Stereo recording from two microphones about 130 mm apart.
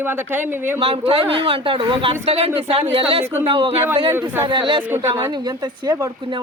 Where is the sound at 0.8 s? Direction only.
45° right (ahead or behind).